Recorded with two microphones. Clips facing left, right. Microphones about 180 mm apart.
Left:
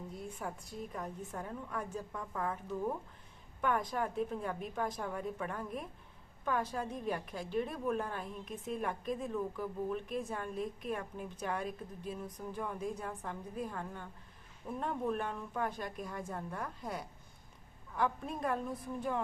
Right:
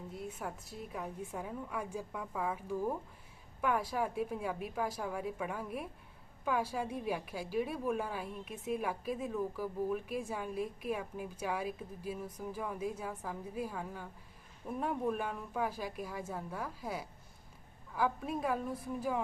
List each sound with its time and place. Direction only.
0.1 s a woman's voice: 5° right (ahead or behind)